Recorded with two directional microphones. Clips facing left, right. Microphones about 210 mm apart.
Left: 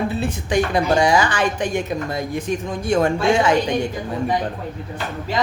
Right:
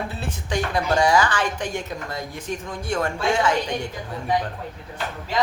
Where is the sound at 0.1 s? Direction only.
15° left (ahead or behind).